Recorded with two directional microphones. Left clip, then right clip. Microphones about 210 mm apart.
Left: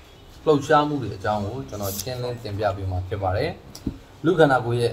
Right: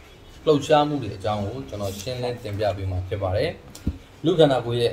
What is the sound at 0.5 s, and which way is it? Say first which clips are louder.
Speech: even; centre (ahead or behind).